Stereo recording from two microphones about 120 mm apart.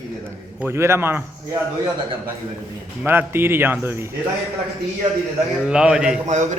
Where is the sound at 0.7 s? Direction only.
20° right (ahead or behind).